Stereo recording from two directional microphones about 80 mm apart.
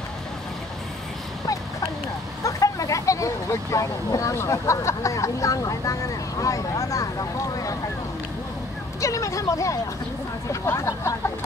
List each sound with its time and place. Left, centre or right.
2.4 s speech: left
9.0 s speech: left